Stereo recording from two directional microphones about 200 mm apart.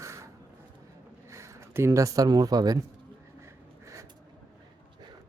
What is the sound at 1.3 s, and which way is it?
Speech, 15° right (ahead or behind).